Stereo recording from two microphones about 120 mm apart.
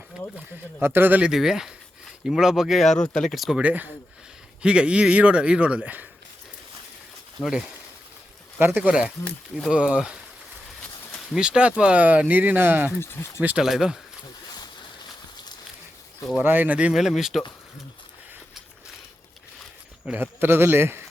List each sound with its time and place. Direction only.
0.3 s speech: 15° right (ahead or behind)
1.3 s speech: 5° right (ahead or behind)
3.6 s speech: 10° right (ahead or behind)
7.4 s speech: 10° left (ahead or behind)
8.5 s speech: 15° right (ahead or behind)
11.3 s speech: 10° right (ahead or behind)
13.0 s speech: 20° left (ahead or behind)
13.4 s speech: 10° right (ahead or behind)
16.4 s speech: 15° right (ahead or behind)
20.1 s a man's voice: 15° right (ahead or behind)